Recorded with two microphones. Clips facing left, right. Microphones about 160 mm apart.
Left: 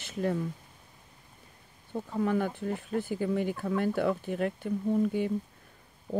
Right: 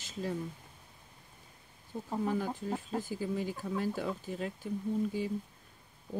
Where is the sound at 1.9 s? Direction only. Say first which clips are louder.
Left 4 dB; 65° left (ahead or behind).